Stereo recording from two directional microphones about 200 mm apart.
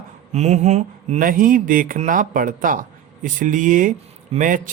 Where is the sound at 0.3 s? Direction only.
35° right (ahead or behind).